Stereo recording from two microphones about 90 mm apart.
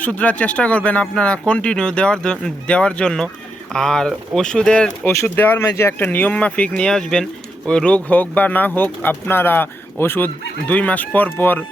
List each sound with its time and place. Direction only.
0.0 s speech: 15° left (ahead or behind)
5.0 s speech: 25° left (ahead or behind)